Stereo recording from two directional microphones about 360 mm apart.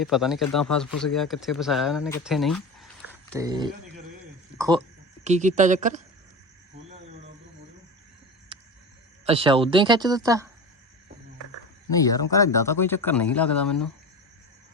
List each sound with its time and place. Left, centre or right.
0.0 s speech: centre
3.3 s a woman's voice: centre
9.2 s speech: centre
12.0 s speech: centre